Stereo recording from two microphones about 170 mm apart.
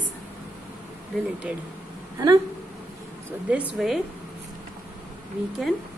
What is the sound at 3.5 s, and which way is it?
Speech, 5° right (ahead or behind).